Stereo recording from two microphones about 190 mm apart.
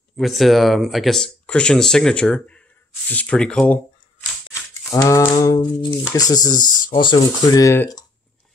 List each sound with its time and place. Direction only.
0.2 s speech: centre (ahead or behind)